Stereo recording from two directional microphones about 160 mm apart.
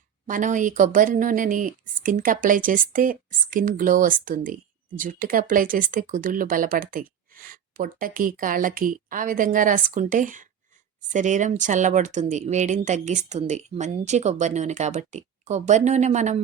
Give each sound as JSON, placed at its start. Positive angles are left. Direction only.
{"t": 0.3, "sound": "speech", "side_deg": -55}